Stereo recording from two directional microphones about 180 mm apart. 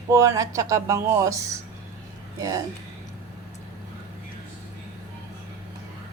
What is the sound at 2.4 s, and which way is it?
Speech, 20° right (ahead or behind).